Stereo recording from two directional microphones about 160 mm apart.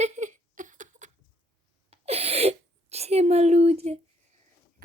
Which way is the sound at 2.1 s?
40° right (ahead or behind).